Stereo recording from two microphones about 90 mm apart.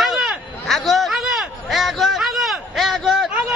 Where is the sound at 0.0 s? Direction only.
Centre (ahead or behind).